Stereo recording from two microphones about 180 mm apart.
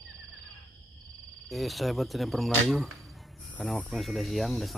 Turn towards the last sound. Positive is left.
turn(degrees=0)  # may be behind; listen again after turning